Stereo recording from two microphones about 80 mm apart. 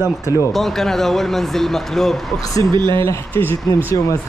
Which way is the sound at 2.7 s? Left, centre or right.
Right.